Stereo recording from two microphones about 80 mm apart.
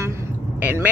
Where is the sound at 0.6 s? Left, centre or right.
Right.